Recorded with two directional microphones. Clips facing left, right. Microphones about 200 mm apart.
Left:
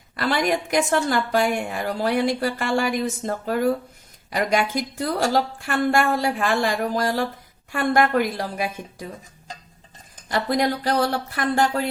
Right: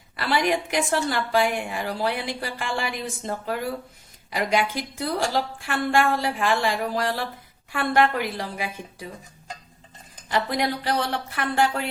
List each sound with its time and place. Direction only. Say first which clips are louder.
0.2 s a woman's voice: left 1 dB; 45° left (ahead or behind)
10.2 s speech: left 3 dB; 40° left (ahead or behind)